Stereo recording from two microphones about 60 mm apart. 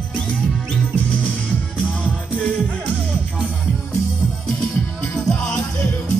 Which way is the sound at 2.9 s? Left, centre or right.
Right.